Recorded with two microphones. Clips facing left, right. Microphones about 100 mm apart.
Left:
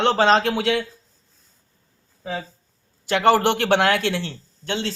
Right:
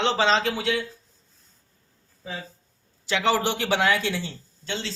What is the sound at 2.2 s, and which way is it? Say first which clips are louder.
Speech: left 6 dB; 65° left (ahead or behind).